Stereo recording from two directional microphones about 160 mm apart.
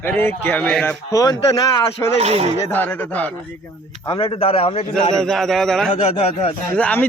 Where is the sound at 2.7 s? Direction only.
10° left (ahead or behind).